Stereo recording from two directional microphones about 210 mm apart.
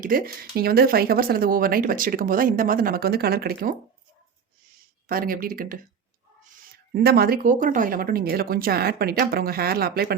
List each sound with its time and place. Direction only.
0.0 s speech: 45° right (ahead or behind)
5.0 s speech: 45° right (ahead or behind)